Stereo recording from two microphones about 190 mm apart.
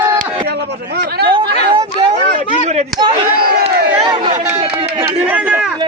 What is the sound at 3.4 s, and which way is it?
Speech, 50° right (ahead or behind).